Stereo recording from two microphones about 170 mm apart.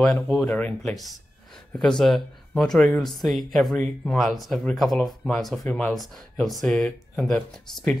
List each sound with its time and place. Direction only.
0.0 s speech: 5° left (ahead or behind)